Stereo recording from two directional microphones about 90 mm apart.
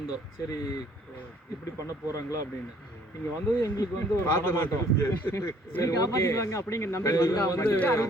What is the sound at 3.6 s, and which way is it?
A man's voice, 30° left (ahead or behind).